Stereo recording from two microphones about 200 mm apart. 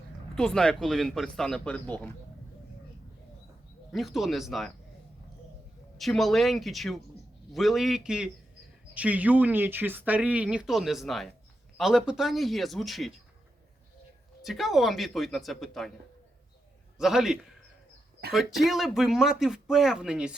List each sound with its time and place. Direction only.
0.3 s a man's voice: 5° left (ahead or behind)
3.9 s a man's voice: centre (ahead or behind)
6.0 s a man's voice: centre (ahead or behind)
14.4 s a man's voice: centre (ahead or behind)
17.0 s a man's voice: centre (ahead or behind)
18.2 s speech: 50° right (ahead or behind)
18.6 s a man's voice: centre (ahead or behind)